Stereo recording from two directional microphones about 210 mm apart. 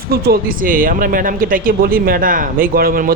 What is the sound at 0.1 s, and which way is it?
Speech, 45° right (ahead or behind).